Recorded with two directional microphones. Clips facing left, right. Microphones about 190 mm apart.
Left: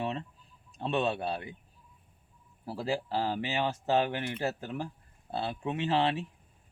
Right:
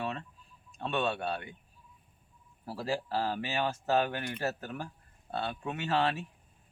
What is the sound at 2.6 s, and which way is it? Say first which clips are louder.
Speech: left 1 dB; 20° left (ahead or behind).